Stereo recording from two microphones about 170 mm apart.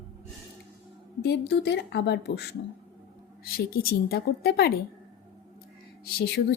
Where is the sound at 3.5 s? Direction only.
60° left (ahead or behind).